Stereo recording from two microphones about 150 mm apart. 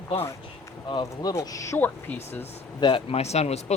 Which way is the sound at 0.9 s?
30° left (ahead or behind).